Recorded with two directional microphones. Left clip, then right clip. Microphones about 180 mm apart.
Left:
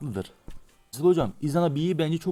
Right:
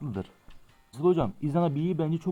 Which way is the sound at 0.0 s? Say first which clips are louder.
Left 3 dB; 25° left (ahead or behind).